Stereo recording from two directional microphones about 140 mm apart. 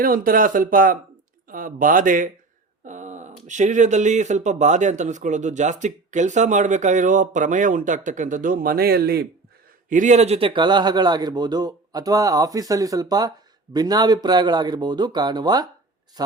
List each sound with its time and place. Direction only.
0.0 s speech: 90° right; by 2.3 s 75° right (ahead or behind)
2.8 s speech: 60° right (ahead or behind); by 9.0 s 90° right
9.9 s speech: 60° right (ahead or behind); by 16.3 s 30° right (ahead or behind)